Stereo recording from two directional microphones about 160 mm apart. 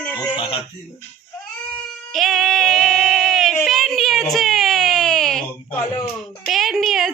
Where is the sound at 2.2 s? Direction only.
Centre (ahead or behind).